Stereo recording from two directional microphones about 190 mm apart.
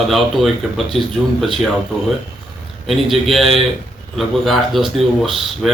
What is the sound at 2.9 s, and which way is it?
Speech, centre (ahead or behind).